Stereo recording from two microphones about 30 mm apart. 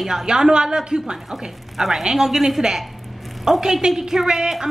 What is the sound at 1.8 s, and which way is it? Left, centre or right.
A woman's voice, centre.